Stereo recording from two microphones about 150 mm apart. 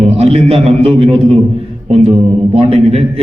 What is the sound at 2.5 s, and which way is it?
Speech, 40° right (ahead or behind).